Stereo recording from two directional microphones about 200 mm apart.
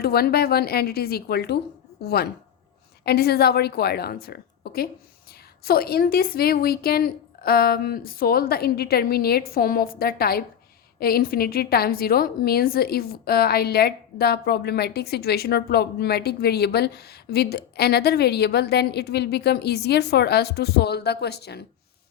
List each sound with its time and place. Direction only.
0.0 s a woman's voice: 50° left (ahead or behind)